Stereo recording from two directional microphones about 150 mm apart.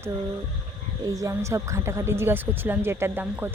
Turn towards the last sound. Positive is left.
turn(degrees=-15)  # may be behind; listen again after turning